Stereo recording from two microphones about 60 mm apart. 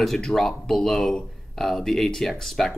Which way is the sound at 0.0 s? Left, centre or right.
Centre.